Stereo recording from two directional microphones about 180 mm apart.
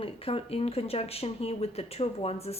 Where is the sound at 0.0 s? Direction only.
30° left (ahead or behind).